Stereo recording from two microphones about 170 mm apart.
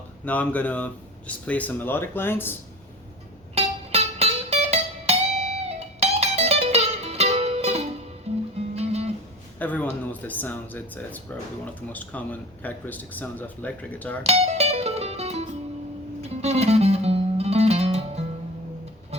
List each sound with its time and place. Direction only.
0.3 s speech: 10° left (ahead or behind)
3.5 s music: 35° right (ahead or behind)
9.6 s speech: 10° left (ahead or behind)
14.3 s music: 40° right (ahead or behind)